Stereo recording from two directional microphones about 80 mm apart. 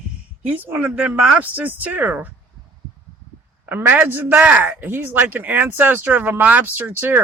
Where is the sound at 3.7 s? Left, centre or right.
Right.